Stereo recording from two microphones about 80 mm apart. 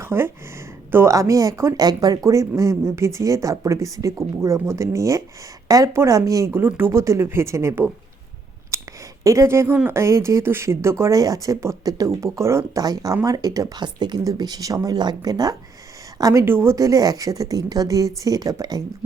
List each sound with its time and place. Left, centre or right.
0.0 s a sound: right
0.9 s a woman's voice: right
1.1 s a woman's voice: right
1.7 s speech: right
2.2 s a woman's voice: right
6.5 s speech: right
8.7 s a sound: right
9.2 s speech: right
11.1 s a woman's voice: right
12.7 s a woman's voice: right
13.8 s a woman's voice: right
14.9 s a woman's voice: right
16.5 s speech: right
16.7 s a woman's voice: right